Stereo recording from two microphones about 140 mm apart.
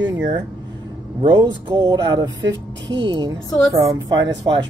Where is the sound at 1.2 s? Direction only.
35° right (ahead or behind).